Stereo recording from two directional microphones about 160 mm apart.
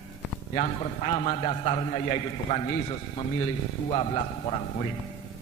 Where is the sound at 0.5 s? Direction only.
35° left (ahead or behind).